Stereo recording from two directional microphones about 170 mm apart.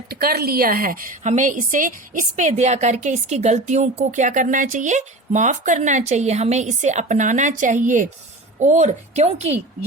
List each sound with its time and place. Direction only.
0.1 s a woman's voice: 65° right (ahead or behind); by 9.6 s 40° right (ahead or behind)